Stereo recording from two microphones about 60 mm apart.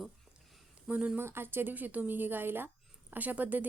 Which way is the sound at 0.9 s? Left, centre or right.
Right.